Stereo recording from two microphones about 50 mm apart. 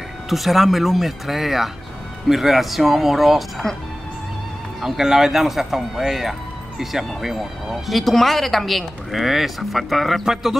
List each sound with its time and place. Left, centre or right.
0.3 s speech: centre
4.8 s speech: centre